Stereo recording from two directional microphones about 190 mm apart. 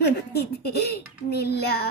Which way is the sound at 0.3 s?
55° left (ahead or behind).